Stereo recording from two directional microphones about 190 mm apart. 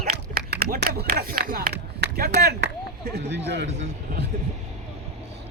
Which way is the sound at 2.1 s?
55° right (ahead or behind).